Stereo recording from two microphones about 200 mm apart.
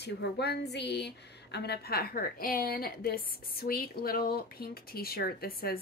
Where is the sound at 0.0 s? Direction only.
55° left (ahead or behind).